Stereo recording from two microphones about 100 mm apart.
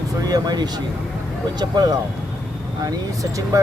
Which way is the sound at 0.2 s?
40° right (ahead or behind).